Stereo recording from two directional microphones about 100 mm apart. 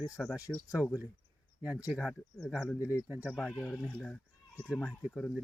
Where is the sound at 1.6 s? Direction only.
15° right (ahead or behind); by 2.8 s 5° left (ahead or behind).